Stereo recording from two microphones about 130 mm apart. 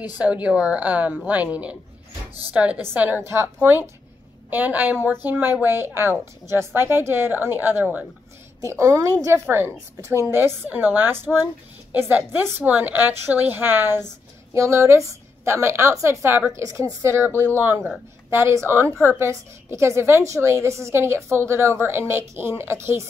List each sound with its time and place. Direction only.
0.2 s a woman's voice: 10° right (ahead or behind)